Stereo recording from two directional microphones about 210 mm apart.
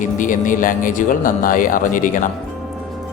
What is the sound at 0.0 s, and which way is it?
Speech, 40° left (ahead or behind).